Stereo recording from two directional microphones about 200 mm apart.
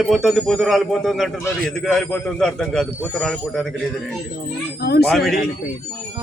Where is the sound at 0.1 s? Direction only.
Centre (ahead or behind).